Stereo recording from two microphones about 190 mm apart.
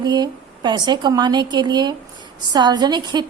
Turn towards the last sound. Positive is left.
turn(degrees=-20)  # may be behind; listen again after turning